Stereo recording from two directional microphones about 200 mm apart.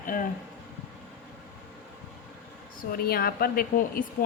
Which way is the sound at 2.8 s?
50° left (ahead or behind).